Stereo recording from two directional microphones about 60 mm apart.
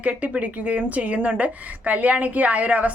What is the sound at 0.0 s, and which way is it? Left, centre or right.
A woman's voice, right.